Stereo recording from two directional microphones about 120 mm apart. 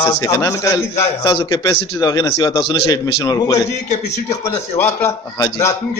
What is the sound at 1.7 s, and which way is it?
A man's voice, 30° left (ahead or behind).